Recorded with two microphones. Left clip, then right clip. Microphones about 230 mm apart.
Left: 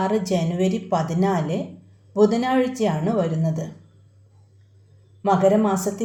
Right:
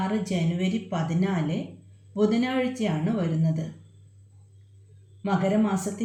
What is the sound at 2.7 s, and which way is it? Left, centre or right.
Speech, centre.